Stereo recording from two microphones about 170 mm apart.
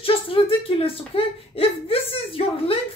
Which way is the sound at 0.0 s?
30° left (ahead or behind).